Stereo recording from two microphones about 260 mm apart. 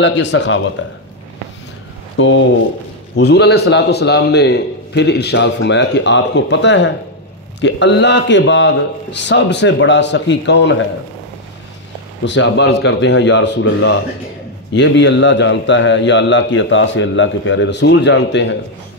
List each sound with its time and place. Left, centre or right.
0.0 s a man's voice: left
2.1 s a man's voice: left
12.3 s a man's voice: left